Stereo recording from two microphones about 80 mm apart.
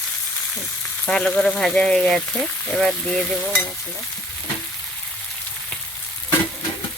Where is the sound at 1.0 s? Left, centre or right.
Centre.